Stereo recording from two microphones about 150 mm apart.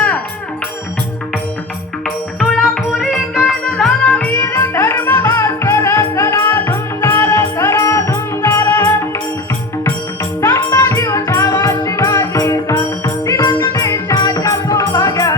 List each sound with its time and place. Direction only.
2.0 s music: centre (ahead or behind)
4.4 s music: 20° left (ahead or behind)
10.4 s music: 20° left (ahead or behind)